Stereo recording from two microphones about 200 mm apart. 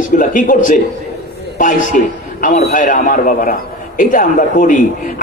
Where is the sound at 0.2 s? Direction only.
40° left (ahead or behind).